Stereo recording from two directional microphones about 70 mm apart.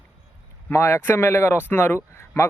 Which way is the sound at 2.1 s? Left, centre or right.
Left.